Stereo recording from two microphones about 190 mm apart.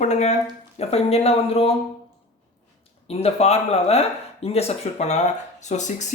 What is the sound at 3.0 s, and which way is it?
Speech, 35° left (ahead or behind).